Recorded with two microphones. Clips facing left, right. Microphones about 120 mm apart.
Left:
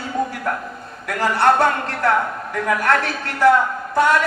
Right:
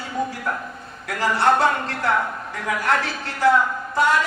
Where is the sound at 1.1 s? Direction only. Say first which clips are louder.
Left 2 dB; 60° left (ahead or behind).